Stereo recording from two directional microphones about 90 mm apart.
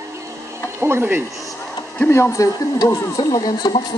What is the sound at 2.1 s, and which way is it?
Speech, 35° left (ahead or behind).